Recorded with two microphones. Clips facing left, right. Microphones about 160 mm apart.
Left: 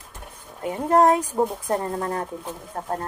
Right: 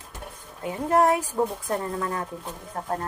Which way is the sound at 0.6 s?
30° left (ahead or behind).